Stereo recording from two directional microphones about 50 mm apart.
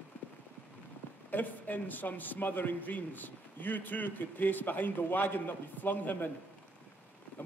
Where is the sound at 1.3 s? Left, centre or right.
Left.